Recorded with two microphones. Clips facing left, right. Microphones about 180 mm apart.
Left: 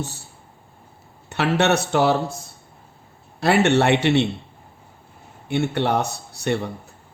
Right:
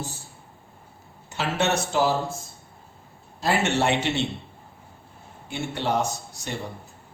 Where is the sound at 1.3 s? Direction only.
65° left (ahead or behind).